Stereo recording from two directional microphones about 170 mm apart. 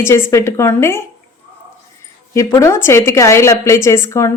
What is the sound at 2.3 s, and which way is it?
A woman's voice, 15° left (ahead or behind).